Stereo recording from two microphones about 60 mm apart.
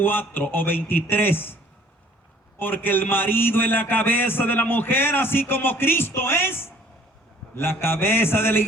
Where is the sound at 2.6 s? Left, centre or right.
Left.